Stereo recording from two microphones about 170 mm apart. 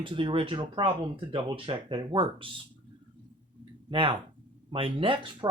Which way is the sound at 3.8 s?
30° right (ahead or behind).